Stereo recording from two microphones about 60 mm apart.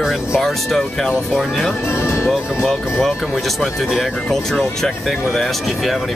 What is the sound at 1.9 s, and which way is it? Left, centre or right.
Speech, left.